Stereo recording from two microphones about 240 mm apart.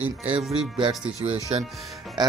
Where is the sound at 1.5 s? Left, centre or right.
Right.